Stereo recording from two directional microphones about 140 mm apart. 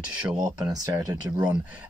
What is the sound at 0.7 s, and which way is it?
Speech, 25° right (ahead or behind).